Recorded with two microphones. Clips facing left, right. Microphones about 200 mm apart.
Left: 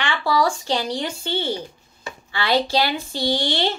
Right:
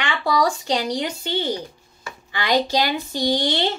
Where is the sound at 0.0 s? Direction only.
20° right (ahead or behind).